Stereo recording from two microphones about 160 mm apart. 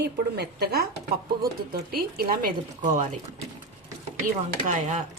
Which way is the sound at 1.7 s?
65° right (ahead or behind).